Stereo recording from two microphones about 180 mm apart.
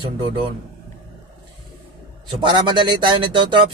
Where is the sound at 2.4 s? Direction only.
25° right (ahead or behind).